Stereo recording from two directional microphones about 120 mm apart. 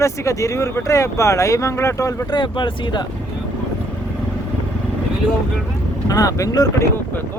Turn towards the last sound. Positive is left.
turn(degrees=30)  # may be behind; listen again after turning